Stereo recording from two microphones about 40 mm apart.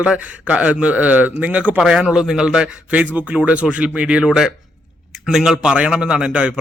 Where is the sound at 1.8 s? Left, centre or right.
Right.